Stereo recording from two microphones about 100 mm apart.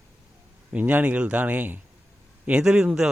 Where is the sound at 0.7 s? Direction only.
15° right (ahead or behind).